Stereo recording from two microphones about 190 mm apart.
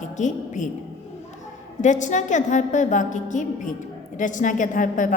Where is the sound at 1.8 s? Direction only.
40° left (ahead or behind).